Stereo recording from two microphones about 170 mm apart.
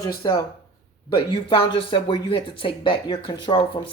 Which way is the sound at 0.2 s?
25° left (ahead or behind).